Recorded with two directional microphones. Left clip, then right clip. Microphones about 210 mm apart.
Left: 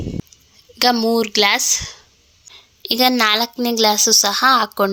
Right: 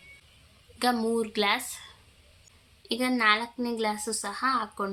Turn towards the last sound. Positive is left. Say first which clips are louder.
# left 14 dB
turn(degrees=40)  # may be behind; listen again after turning